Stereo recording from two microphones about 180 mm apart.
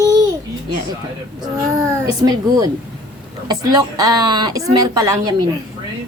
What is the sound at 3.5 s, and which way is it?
A woman's voice, 20° right (ahead or behind).